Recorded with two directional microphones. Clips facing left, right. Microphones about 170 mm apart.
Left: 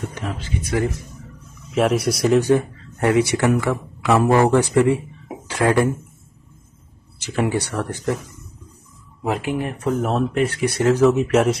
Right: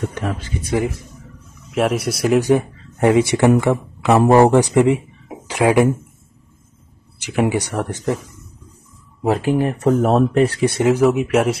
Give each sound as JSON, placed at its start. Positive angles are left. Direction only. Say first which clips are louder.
{"t": 1.7, "sound": "speech", "louder": "even", "side_deg": 0}
{"t": 2.4, "sound": "a man's voice", "louder": "right 1 dB", "side_deg": -20}
{"t": 7.2, "sound": "speech", "louder": "right 3 dB", "side_deg": -15}
{"t": 9.2, "sound": "speech", "louder": "right 6 dB", "side_deg": -35}
{"t": 10.8, "sound": "speech", "louder": "even", "side_deg": -15}